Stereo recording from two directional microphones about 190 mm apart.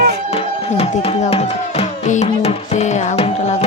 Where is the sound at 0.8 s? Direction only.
30° left (ahead or behind).